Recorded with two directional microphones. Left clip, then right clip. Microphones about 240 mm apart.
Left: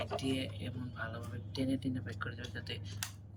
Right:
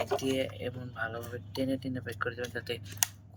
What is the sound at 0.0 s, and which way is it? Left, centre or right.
Speech, centre.